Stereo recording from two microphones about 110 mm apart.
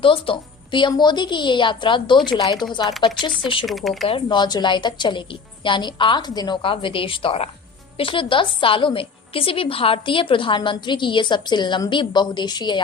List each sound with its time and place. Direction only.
0.0 s a woman's voice: 50° left (ahead or behind)
3.7 s speech: centre (ahead or behind)
4.3 s a woman's voice: 40° left (ahead or behind)
6.6 s a woman's voice: 55° left (ahead or behind)